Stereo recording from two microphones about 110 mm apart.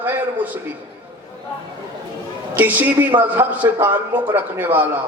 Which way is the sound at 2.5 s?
15° right (ahead or behind).